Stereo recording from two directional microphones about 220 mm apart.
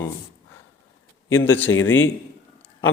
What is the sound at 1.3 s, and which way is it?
Speech, 10° left (ahead or behind).